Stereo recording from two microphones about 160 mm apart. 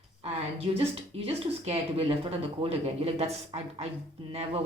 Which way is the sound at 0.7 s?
40° right (ahead or behind).